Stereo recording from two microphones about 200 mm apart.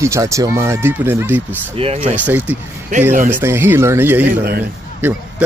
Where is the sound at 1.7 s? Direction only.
30° right (ahead or behind).